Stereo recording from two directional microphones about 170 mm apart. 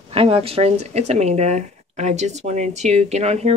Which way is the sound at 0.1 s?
35° right (ahead or behind).